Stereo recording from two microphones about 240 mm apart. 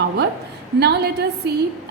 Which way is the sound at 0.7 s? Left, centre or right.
Right.